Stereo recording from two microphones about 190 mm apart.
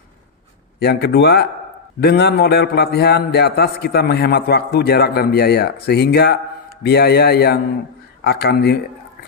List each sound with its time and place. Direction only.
0.8 s a man's voice: 60° left (ahead or behind)